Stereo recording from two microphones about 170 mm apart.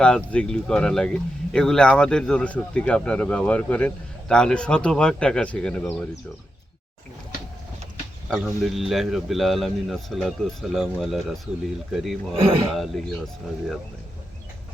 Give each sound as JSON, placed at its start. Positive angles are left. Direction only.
{"t": 0.0, "sound": "speech", "side_deg": 5}
{"t": 8.3, "sound": "speech", "side_deg": 0}
{"t": 12.4, "sound": "speech", "side_deg": -35}
{"t": 12.7, "sound": "speech", "side_deg": 0}